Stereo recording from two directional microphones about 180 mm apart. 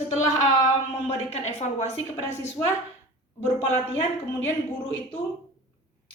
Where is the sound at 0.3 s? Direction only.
20° left (ahead or behind).